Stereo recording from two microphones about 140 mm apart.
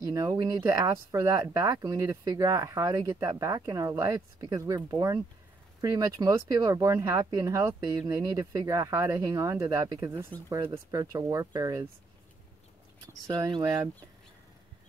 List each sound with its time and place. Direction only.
0.0 s speech: 25° right (ahead or behind)
13.3 s speech: 30° right (ahead or behind)